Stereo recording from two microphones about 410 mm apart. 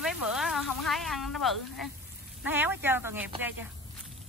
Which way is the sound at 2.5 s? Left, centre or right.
Centre.